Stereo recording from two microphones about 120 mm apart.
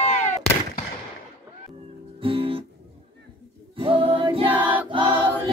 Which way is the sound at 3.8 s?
50° right (ahead or behind).